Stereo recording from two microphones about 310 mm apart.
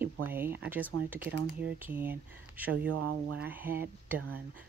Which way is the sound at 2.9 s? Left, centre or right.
Right.